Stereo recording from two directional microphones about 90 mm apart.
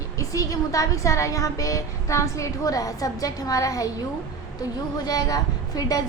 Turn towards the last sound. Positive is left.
turn(degrees=45)  # may be behind; listen again after turning